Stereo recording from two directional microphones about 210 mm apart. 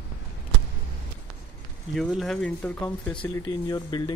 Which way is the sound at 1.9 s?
Centre (ahead or behind).